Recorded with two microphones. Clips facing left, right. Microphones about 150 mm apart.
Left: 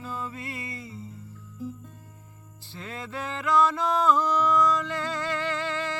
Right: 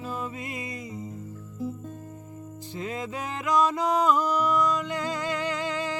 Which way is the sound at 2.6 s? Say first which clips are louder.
Right 5 dB; 15° right (ahead or behind).